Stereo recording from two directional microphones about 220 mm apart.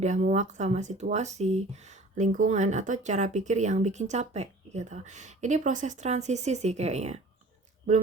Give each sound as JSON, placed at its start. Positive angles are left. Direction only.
{"t": 0.0, "sound": "speech", "side_deg": -30}